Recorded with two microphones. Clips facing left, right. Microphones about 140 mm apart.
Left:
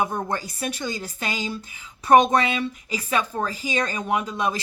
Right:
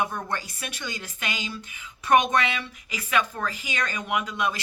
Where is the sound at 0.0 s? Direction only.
30° left (ahead or behind).